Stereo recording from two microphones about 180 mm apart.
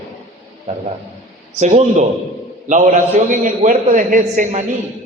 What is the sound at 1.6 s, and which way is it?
A man's voice, 40° right (ahead or behind).